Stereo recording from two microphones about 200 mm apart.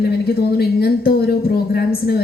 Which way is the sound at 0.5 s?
55° left (ahead or behind).